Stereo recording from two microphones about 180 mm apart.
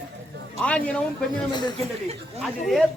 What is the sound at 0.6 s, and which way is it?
Speech, 5° left (ahead or behind).